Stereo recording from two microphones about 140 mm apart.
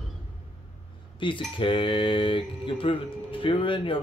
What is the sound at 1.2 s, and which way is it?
Speech, 35° left (ahead or behind).